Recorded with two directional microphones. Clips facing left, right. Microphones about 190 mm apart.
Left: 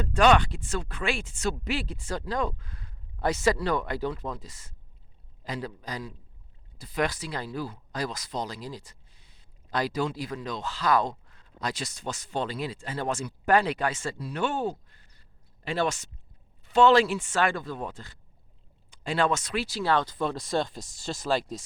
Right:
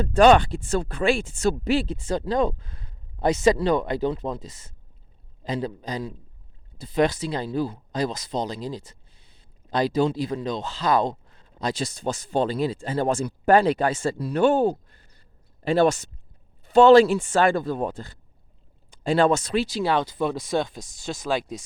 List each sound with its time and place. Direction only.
0.0 s speech: 30° right (ahead or behind); by 21.6 s centre (ahead or behind)